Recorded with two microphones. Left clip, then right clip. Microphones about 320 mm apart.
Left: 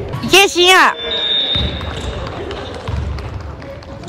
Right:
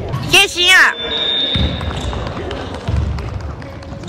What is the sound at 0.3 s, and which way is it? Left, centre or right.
Speech, centre.